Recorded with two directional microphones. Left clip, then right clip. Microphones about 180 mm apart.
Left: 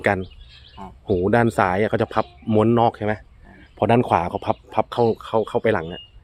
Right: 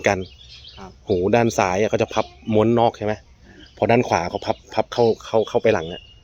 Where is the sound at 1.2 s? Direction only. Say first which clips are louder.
Even; 15° left (ahead or behind).